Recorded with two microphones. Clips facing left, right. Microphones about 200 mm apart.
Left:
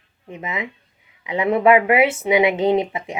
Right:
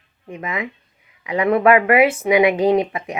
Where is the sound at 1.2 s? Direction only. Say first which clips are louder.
Right 2 dB; 25° left (ahead or behind).